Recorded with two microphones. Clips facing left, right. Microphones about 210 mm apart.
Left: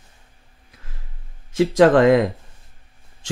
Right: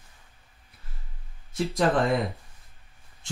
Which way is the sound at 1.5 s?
90° left.